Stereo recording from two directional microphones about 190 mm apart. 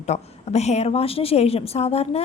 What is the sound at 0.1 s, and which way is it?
A woman's voice, 35° left (ahead or behind).